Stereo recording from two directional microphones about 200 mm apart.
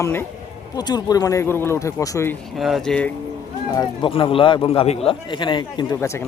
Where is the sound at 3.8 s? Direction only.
25° left (ahead or behind).